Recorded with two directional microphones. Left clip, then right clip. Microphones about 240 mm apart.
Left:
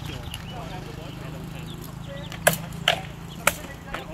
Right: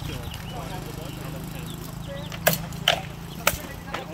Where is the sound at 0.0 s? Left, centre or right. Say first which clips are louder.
Right 1 dB; right.